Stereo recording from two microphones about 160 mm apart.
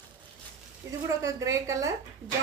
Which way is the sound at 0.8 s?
20° right (ahead or behind).